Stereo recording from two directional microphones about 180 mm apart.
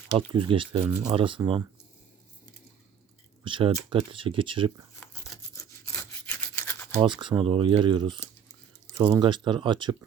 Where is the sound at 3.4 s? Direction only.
30° right (ahead or behind).